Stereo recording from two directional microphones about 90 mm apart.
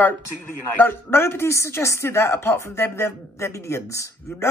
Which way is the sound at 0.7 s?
25° left (ahead or behind).